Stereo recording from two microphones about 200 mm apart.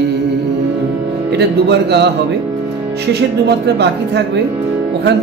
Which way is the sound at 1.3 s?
55° right (ahead or behind).